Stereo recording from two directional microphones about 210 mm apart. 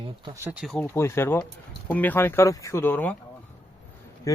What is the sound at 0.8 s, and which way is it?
Speech, 10° left (ahead or behind).